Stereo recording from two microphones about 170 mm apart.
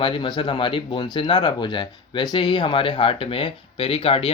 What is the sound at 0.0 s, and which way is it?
Speech, 30° left (ahead or behind).